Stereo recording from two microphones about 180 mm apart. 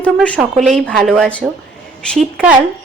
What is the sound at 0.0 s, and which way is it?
A woman's voice, 5° left (ahead or behind).